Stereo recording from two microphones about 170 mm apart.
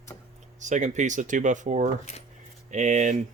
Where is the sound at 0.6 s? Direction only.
45° right (ahead or behind).